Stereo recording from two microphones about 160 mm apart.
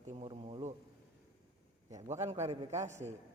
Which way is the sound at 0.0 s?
45° right (ahead or behind).